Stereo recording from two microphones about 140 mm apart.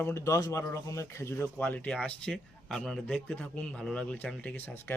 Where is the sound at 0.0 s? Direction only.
20° left (ahead or behind).